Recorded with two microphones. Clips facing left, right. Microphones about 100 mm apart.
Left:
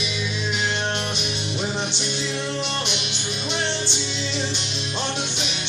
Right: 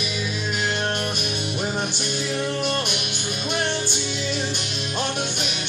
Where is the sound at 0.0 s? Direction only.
45° right (ahead or behind).